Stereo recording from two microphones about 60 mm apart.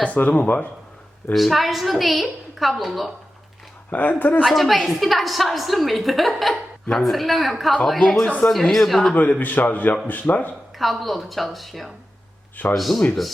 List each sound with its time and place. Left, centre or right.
0.0 s a man's voice: left
1.3 s a woman's voice: centre
4.2 s a man's voice: left
4.4 s a woman's voice: centre
9.1 s a man's voice: left
10.8 s a woman's voice: centre